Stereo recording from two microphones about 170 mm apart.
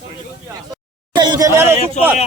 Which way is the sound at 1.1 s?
25° right (ahead or behind).